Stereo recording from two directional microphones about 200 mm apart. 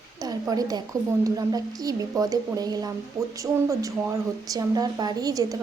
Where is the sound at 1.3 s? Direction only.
20° right (ahead or behind).